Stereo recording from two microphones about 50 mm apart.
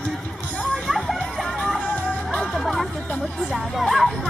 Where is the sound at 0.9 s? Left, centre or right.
Centre.